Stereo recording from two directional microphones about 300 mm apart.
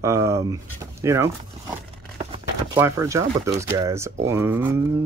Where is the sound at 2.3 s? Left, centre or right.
Centre.